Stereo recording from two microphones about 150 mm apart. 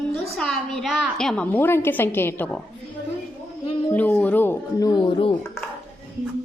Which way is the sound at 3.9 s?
10° left (ahead or behind).